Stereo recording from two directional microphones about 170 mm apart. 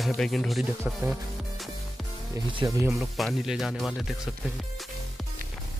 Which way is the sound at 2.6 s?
25° right (ahead or behind).